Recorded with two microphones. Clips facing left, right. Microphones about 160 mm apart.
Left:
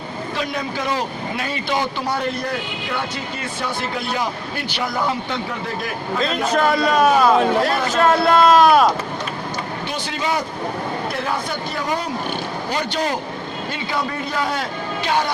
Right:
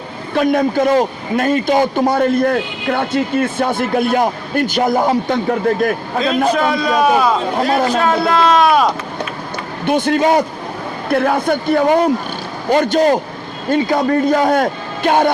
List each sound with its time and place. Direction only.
0.3 s a man's voice: 50° right (ahead or behind)
6.7 s speech: centre (ahead or behind)
9.8 s a man's voice: 55° right (ahead or behind)